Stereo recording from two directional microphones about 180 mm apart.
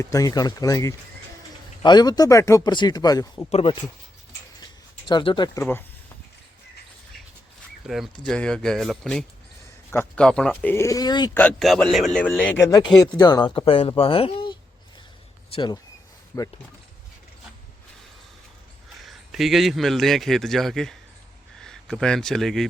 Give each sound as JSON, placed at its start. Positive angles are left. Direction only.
{"t": 0.0, "sound": "speech", "side_deg": 20}
{"t": 3.5, "sound": "speech", "side_deg": 30}
{"t": 4.6, "sound": "a sound", "side_deg": 25}
{"t": 5.5, "sound": "a man's voice", "side_deg": 10}
{"t": 7.9, "sound": "a man's voice", "side_deg": 0}
{"t": 11.3, "sound": "a man's voice", "side_deg": 5}
{"t": 19.0, "sound": "a man's voice", "side_deg": 0}